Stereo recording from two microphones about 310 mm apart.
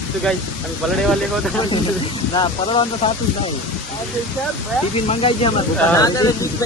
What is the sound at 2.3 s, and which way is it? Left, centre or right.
Speech, centre.